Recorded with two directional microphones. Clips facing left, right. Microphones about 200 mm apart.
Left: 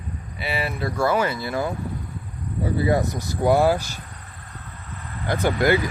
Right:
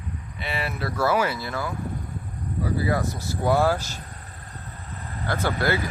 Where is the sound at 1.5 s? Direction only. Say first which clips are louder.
Left 4 dB; 20° left (ahead or behind).